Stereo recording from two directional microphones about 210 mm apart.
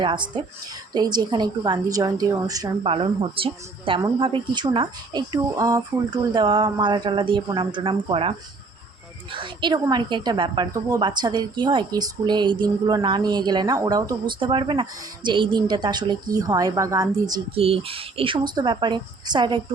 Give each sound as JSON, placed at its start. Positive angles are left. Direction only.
{"t": 0.0, "sound": "a woman's voice", "side_deg": -25}